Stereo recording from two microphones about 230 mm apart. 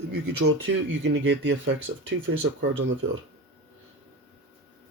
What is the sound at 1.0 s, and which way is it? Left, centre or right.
Speech, right.